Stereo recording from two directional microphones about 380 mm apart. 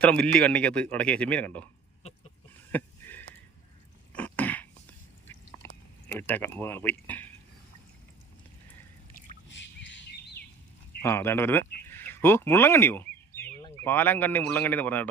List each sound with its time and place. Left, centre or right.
0.0 s a man's voice: centre
2.5 s a sound: centre
4.1 s throat clearing: centre
5.6 s a sound: centre
6.1 s a man's voice: centre
9.5 s bird: left
11.0 s a man's voice: centre